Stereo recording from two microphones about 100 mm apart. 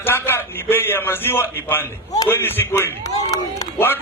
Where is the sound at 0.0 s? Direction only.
25° left (ahead or behind).